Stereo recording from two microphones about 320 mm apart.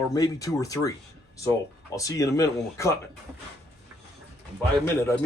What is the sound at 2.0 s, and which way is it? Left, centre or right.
Speech, centre.